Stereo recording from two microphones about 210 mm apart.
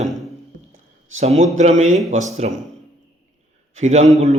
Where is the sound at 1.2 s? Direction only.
30° right (ahead or behind).